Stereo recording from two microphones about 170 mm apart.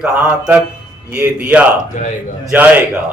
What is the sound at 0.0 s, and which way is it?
A man's voice, 10° right (ahead or behind).